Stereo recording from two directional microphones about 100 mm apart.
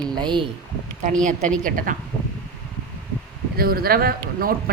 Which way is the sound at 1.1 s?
5° left (ahead or behind).